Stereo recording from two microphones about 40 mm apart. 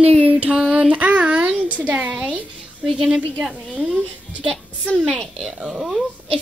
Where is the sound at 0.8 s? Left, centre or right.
Right.